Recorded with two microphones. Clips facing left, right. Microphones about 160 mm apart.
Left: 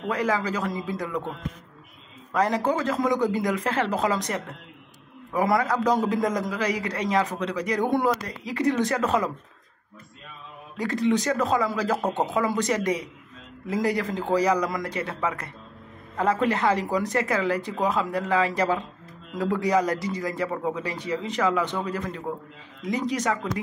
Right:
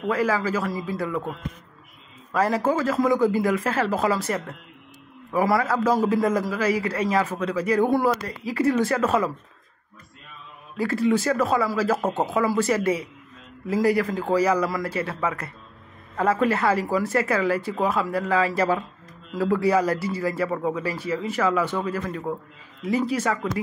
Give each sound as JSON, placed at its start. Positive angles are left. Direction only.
{"t": 0.1, "sound": "a man's voice", "side_deg": 20}
{"t": 2.3, "sound": "a man's voice", "side_deg": 20}
{"t": 5.3, "sound": "a man's voice", "side_deg": 20}
{"t": 10.8, "sound": "a man's voice", "side_deg": 20}
{"t": 12.0, "sound": "speech", "side_deg": -5}
{"t": 12.3, "sound": "a man's voice", "side_deg": 20}